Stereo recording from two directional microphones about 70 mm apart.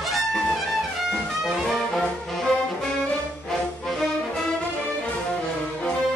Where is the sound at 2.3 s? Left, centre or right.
Centre.